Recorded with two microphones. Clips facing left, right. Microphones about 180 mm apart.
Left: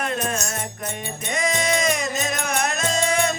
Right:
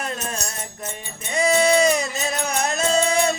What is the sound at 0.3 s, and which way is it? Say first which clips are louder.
Music: left 4 dB; 35° right (ahead or behind).